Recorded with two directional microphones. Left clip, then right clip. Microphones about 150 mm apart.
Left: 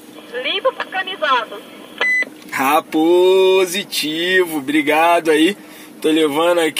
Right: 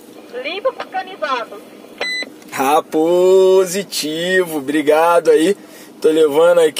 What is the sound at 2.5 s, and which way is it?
Speech, 20° right (ahead or behind).